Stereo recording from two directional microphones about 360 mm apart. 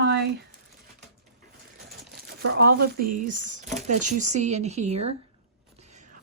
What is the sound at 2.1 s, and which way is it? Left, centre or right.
Speech, right.